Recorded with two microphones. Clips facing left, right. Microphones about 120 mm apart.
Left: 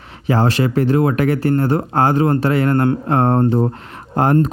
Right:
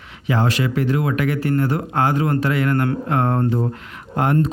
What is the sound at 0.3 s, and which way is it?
Speech, 35° left (ahead or behind).